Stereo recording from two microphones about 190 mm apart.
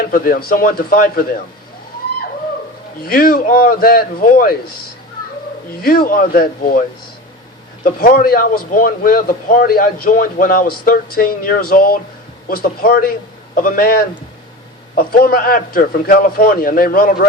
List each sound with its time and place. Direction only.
0.0 s speech: 50° left (ahead or behind)
3.0 s speech: 50° left (ahead or behind)
5.8 s speech: 50° left (ahead or behind)
7.9 s speech: 50° left (ahead or behind)